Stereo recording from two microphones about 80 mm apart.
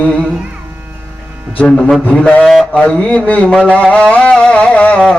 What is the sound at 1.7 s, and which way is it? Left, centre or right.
Speech, centre.